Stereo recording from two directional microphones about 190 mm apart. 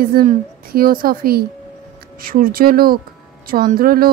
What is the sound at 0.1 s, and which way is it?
Speech, 45° right (ahead or behind).